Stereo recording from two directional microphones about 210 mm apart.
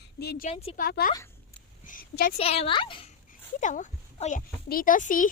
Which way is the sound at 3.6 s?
35° left (ahead or behind).